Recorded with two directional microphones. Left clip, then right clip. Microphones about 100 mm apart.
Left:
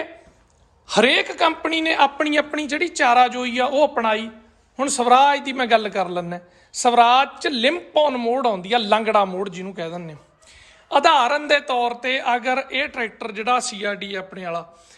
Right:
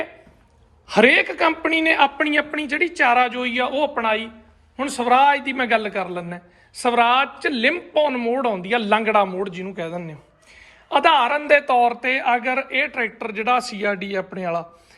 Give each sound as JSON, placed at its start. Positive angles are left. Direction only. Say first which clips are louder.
{"t": 0.9, "sound": "a woman's voice", "louder": "right 2 dB", "side_deg": 35}
{"t": 3.8, "sound": "a woman's voice", "louder": "left 1 dB", "side_deg": 65}
{"t": 11.7, "sound": "a woman's voice", "louder": "right 4 dB", "side_deg": 25}